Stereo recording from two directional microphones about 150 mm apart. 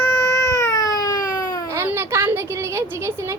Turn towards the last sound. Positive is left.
turn(degrees=-20)  # may be behind; listen again after turning